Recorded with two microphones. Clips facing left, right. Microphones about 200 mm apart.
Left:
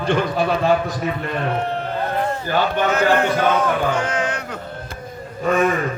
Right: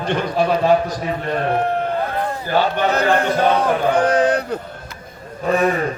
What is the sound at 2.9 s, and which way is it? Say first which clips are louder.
Male singing: even; 35° right (ahead or behind).